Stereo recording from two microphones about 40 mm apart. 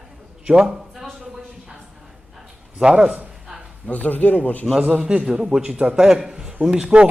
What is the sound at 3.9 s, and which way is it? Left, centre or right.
Speech, left.